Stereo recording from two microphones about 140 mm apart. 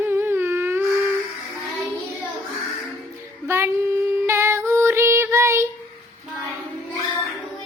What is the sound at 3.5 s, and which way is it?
Child singing, 15° right (ahead or behind).